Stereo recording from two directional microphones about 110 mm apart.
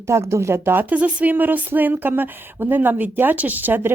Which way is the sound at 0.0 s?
25° right (ahead or behind).